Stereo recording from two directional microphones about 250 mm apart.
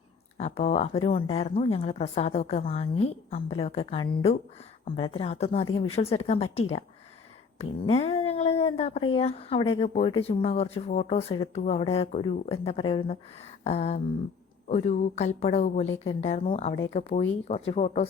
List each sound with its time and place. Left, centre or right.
0.3 s speech: left
7.6 s a sound: left
9.1 s speech: left